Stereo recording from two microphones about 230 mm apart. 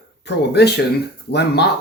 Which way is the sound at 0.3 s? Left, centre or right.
Left.